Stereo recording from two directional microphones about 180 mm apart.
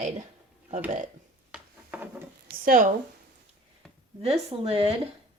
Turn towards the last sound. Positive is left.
turn(degrees=-35)  # may be behind; listen again after turning